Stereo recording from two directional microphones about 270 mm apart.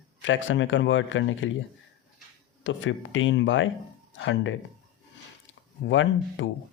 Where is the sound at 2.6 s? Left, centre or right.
Left.